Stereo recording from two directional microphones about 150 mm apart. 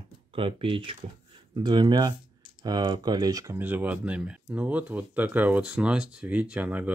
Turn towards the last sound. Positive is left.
turn(degrees=-10)  # may be behind; listen again after turning